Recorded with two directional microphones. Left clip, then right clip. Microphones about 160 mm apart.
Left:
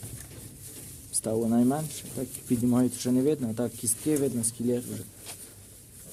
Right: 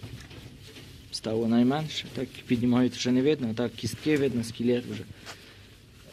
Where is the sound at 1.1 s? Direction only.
45° left (ahead or behind).